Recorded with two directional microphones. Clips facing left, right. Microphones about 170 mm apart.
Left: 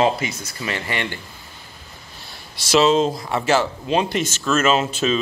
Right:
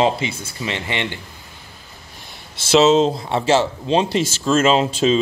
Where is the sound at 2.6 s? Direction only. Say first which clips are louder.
Right 3 dB; 25° right (ahead or behind).